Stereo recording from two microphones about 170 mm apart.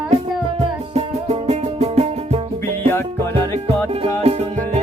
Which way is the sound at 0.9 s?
40° right (ahead or behind).